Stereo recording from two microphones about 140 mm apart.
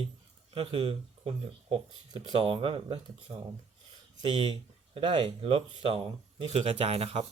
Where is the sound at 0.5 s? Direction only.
40° right (ahead or behind).